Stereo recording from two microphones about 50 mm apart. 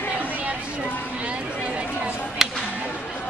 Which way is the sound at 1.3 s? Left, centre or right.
Right.